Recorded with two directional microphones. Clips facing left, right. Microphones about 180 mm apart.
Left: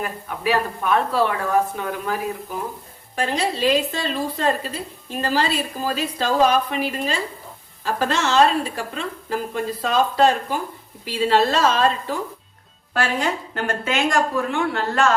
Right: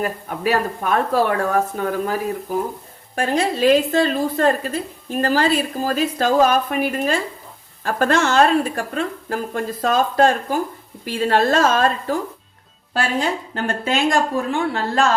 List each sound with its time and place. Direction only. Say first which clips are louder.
0.0 s a woman's voice: right 3 dB; 45° right (ahead or behind)
13.5 s speech: right 2 dB; 35° right (ahead or behind)